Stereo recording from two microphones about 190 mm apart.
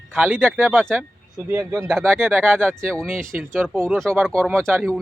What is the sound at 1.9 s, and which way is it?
A man's voice, centre (ahead or behind).